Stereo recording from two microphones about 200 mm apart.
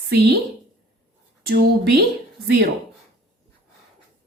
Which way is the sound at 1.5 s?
55° right (ahead or behind).